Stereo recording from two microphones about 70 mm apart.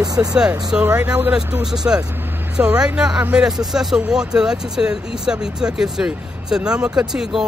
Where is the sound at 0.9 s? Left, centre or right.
Right.